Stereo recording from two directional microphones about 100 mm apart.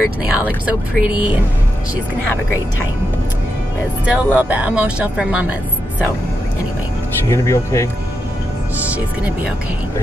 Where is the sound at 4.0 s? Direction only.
15° right (ahead or behind).